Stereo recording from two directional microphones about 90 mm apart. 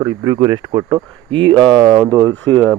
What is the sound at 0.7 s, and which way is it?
Speech, 65° right (ahead or behind).